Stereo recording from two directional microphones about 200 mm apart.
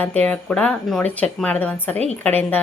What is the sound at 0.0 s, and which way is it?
A woman's voice, 5° left (ahead or behind).